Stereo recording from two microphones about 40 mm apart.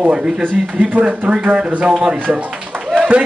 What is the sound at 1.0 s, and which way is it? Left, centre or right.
Speech, right.